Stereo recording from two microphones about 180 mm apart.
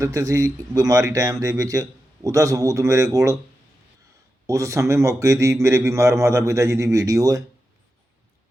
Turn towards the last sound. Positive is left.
turn(degrees=-20)  # may be behind; listen again after turning